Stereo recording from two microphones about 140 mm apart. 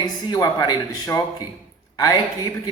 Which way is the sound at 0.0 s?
30° left (ahead or behind).